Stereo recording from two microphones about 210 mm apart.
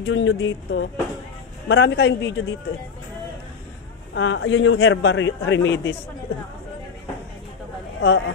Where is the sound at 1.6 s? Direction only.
55° left (ahead or behind).